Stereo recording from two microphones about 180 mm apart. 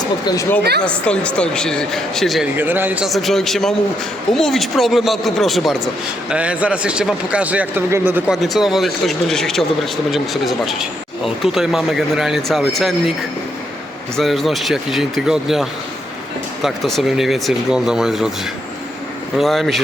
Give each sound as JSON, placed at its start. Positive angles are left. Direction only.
{"t": 0.0, "sound": "speech", "side_deg": 20}
{"t": 0.8, "sound": "speech", "side_deg": 5}
{"t": 2.6, "sound": "speech", "side_deg": -10}
{"t": 8.4, "sound": "speech", "side_deg": 0}
{"t": 14.2, "sound": "speech", "side_deg": 0}
{"t": 16.6, "sound": "speech", "side_deg": 0}
{"t": 19.4, "sound": "speech", "side_deg": 0}